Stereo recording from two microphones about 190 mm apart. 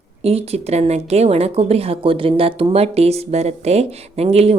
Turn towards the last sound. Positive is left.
turn(degrees=-30)  # may be behind; listen again after turning